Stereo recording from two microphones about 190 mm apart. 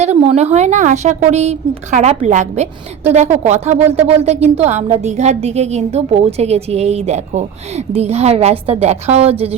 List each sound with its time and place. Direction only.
0.0 s speech: 35° right (ahead or behind)